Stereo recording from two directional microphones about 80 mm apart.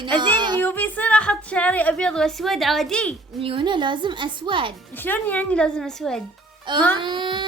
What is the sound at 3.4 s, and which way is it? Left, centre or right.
A woman's voice, right.